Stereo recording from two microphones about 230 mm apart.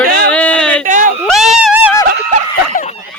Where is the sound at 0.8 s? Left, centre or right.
Right.